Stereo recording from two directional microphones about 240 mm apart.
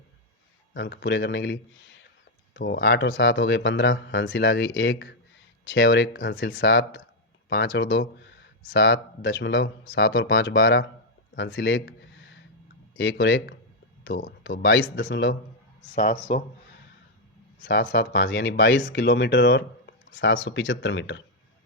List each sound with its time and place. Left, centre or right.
0.7 s speech: left
2.6 s speech: left
13.0 s speech: left
14.6 s speech: left
17.6 s speech: left